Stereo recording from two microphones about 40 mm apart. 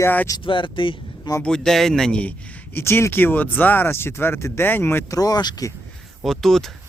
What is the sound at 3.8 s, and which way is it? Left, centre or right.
Speech, left.